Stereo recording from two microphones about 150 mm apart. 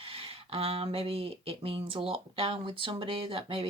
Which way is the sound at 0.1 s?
40° right (ahead or behind).